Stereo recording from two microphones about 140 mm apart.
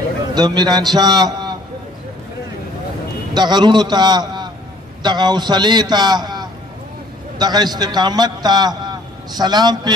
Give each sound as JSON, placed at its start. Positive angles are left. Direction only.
{"t": 0.3, "sound": "a man's voice", "side_deg": -30}
{"t": 3.3, "sound": "a man's voice", "side_deg": -30}